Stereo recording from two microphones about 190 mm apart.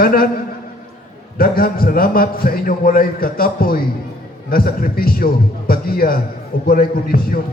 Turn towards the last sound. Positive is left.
turn(degrees=50)  # may be behind; listen again after turning